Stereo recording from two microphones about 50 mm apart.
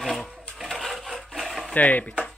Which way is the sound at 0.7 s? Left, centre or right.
Centre.